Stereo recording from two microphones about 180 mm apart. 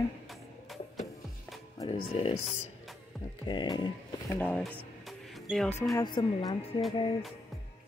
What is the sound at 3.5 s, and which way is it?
Speech, 25° left (ahead or behind).